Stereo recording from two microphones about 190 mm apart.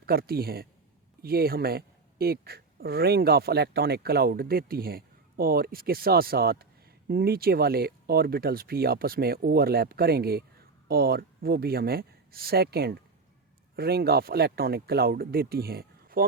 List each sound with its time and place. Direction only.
0.0 s speech: 55° right (ahead or behind)